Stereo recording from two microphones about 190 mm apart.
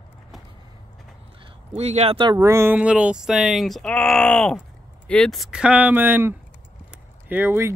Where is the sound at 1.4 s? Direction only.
35° right (ahead or behind).